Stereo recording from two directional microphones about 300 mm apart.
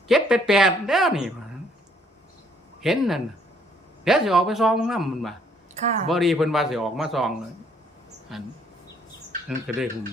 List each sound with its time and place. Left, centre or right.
0.1 s a man's voice: centre
2.8 s a man's voice: centre
5.8 s speech: right
6.1 s a man's voice: centre
9.7 s a man's voice: centre